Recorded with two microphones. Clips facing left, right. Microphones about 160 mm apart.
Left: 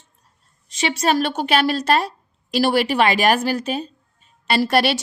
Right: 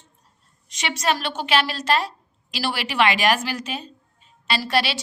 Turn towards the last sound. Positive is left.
turn(degrees=55)  # may be behind; listen again after turning